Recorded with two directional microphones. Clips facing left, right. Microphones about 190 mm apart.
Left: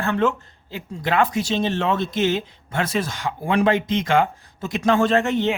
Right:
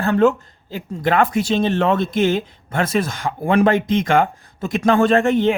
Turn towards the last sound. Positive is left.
turn(degrees=-50)  # may be behind; listen again after turning